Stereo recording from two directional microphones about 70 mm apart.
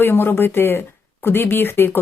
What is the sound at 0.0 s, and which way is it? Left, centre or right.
Speech, left.